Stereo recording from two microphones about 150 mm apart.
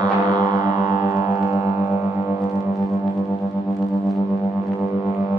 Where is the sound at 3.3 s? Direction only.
20° left (ahead or behind).